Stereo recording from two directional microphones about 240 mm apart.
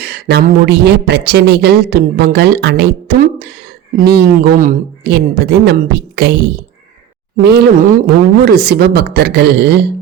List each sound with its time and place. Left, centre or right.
0.0 s a woman's voice: right
7.4 s a woman's voice: right